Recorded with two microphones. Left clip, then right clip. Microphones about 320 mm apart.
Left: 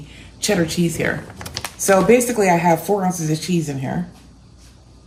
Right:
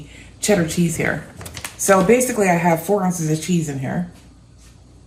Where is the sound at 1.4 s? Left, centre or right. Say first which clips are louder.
Left 4 dB; left.